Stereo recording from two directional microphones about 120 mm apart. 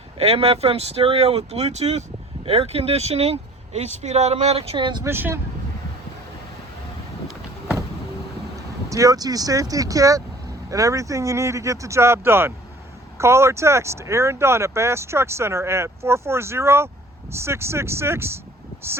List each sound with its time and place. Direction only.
0.2 s speech: 55° right (ahead or behind)
5.0 s speech: 20° right (ahead or behind)
8.9 s speech: 30° right (ahead or behind)